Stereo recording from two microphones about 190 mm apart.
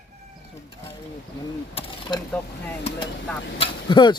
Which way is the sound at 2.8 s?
25° left (ahead or behind).